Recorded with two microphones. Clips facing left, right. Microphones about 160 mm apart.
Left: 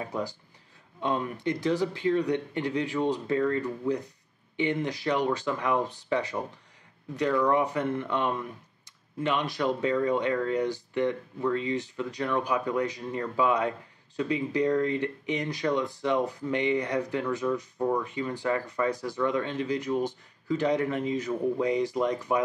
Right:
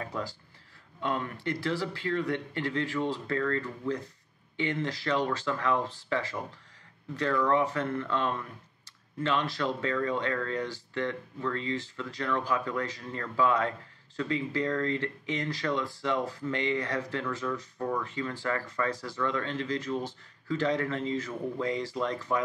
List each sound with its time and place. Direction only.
0.0 s speech: 15° left (ahead or behind)